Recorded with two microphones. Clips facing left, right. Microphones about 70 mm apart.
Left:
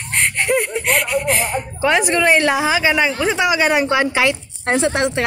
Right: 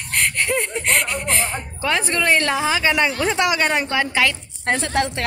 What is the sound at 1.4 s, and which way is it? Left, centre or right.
Speech, left.